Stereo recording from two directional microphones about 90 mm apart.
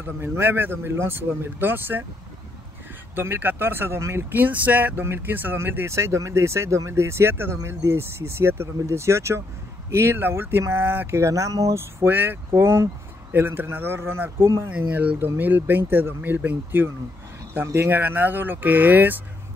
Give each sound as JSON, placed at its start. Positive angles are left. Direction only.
{"t": 0.0, "sound": "speech", "side_deg": -25}
{"t": 3.2, "sound": "speech", "side_deg": -25}
{"t": 14.7, "sound": "speech", "side_deg": -15}